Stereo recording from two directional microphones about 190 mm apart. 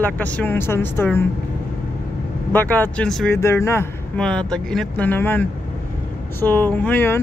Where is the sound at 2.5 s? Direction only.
10° left (ahead or behind).